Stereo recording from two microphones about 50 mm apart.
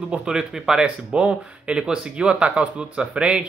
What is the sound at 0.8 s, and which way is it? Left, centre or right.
Speech, right.